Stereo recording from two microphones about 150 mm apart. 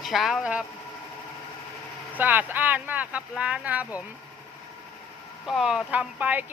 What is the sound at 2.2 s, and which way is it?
Speech, 10° right (ahead or behind).